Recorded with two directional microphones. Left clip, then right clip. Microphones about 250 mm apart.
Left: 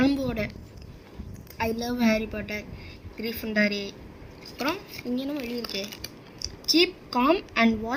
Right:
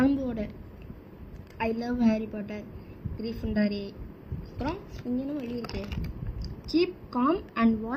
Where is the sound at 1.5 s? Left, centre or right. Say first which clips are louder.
Left 2 dB; centre.